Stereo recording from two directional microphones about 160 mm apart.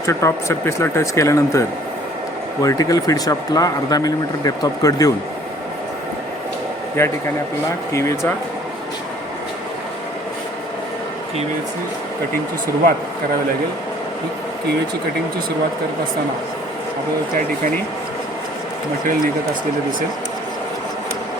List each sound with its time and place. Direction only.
0.0 s speech: 20° left (ahead or behind)
7.0 s speech: 15° left (ahead or behind)